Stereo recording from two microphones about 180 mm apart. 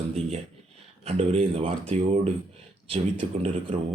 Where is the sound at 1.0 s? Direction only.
35° right (ahead or behind).